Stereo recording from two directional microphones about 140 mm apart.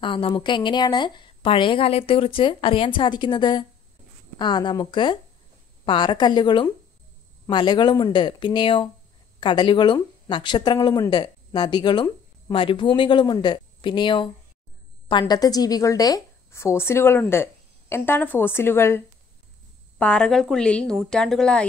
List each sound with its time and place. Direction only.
0.0 s a woman's voice: 35° left (ahead or behind); by 21.6 s 5° left (ahead or behind)